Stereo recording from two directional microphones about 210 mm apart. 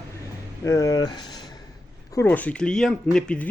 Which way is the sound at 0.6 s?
15° left (ahead or behind).